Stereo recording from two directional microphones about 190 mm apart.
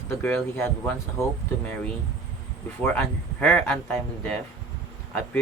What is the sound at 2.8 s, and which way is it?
Speech, 5° left (ahead or behind).